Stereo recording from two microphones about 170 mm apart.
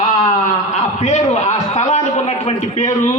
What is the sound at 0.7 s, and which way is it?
A man's voice, 45° left (ahead or behind).